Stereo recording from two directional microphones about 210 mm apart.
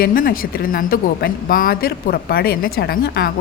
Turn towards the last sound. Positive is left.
turn(degrees=45)  # may be behind; listen again after turning